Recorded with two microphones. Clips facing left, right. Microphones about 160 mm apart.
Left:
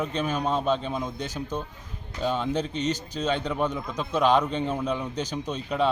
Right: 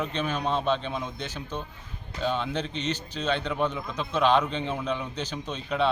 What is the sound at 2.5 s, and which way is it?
Speech, 45° left (ahead or behind).